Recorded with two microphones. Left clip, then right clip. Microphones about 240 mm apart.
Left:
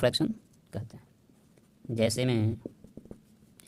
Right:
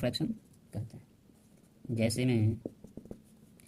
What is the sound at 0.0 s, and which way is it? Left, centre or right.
Speech, left.